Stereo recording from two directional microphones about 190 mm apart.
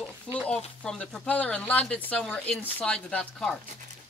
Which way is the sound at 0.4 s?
5° left (ahead or behind).